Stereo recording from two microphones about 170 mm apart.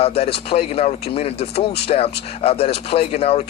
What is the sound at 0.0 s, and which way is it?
A man's voice, 35° left (ahead or behind).